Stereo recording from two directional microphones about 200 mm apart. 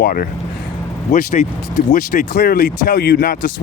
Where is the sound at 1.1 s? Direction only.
35° left (ahead or behind).